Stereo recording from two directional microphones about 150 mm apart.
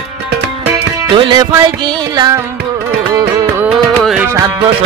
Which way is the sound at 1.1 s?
30° right (ahead or behind).